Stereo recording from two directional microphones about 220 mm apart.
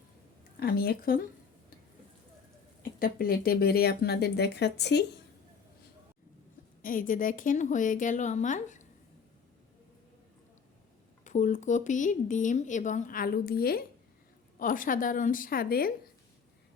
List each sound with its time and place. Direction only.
0.6 s speech: 45° left (ahead or behind)
3.0 s speech: 40° left (ahead or behind)
6.8 s speech: 40° left (ahead or behind)
11.2 s speech: 35° left (ahead or behind)